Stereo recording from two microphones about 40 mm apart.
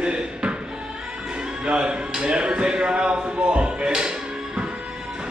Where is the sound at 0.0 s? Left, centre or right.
Right.